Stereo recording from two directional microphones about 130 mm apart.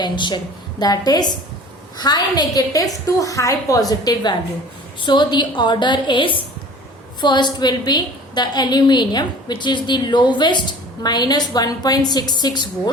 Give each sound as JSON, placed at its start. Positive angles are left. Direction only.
{"t": 0.0, "sound": "a woman's voice", "side_deg": 35}